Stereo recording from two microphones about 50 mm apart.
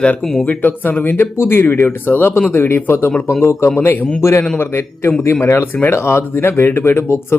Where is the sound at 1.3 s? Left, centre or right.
Left.